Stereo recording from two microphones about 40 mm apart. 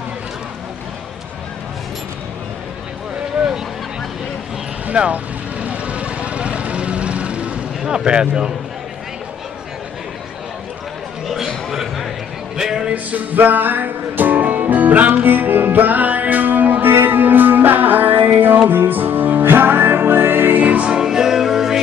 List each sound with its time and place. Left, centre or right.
4.8 s vehicle: right
7.8 s speech: right
11.3 s a sound: centre
12.5 s music: centre
12.9 s music: right
20.6 s music: right
20.9 s music: centre